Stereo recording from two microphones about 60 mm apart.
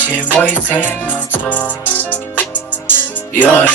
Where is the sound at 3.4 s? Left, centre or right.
Left.